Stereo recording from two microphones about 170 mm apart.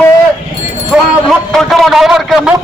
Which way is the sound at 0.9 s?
5° right (ahead or behind).